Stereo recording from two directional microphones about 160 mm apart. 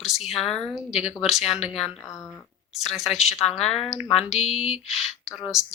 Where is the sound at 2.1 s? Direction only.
20° left (ahead or behind).